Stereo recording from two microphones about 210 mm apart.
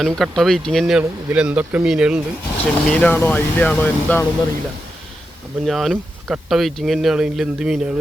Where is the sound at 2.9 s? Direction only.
10° left (ahead or behind).